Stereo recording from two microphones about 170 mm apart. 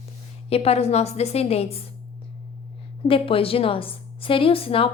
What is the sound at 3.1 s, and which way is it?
A woman's voice, 35° left (ahead or behind).